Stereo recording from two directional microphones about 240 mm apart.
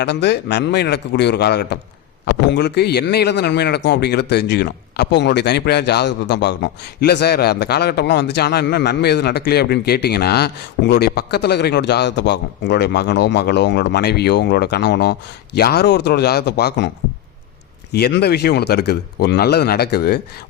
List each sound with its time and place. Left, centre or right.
0.0 s speech: left
17.9 s speech: left